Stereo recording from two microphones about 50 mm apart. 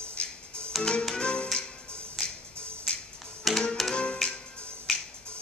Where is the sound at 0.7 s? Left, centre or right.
Centre.